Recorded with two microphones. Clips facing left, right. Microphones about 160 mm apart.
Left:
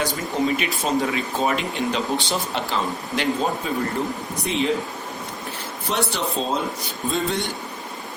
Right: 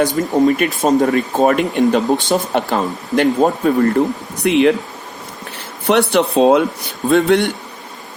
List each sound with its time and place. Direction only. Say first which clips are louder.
0.0 s speech: right 9 dB; 50° right (ahead or behind)
4.4 s speech: right 12 dB; 70° right (ahead or behind)
5.9 s speech: right 11 dB; 65° right (ahead or behind)